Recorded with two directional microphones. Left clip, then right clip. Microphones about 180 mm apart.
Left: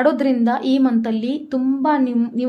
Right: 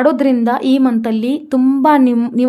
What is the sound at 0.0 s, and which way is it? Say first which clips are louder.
A woman's voice: right 4 dB; 25° right (ahead or behind).